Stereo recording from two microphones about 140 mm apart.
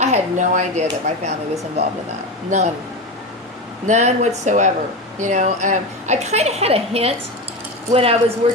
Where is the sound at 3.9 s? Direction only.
55° right (ahead or behind).